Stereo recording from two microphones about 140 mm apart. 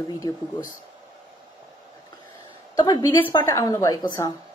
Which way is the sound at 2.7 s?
30° left (ahead or behind).